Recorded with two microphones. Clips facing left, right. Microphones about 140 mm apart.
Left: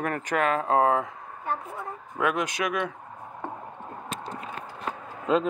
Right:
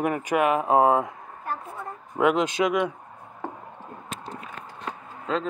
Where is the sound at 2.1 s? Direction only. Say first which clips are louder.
Right 5 dB; 20° right (ahead or behind).